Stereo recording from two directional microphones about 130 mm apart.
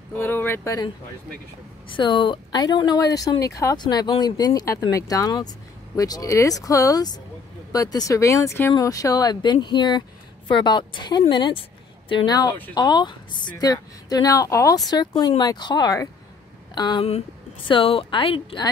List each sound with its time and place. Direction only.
0.1 s speech: 15° left (ahead or behind)
1.9 s a woman's voice: 40° left (ahead or behind)
17.6 s speech: 45° left (ahead or behind)